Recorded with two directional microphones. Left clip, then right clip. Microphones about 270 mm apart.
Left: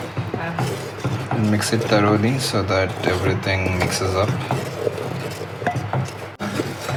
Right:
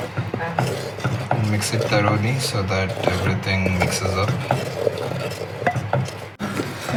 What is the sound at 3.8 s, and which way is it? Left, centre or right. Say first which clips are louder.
Speech: left 1 dB; centre.